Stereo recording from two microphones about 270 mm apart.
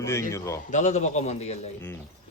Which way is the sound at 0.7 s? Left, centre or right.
Left.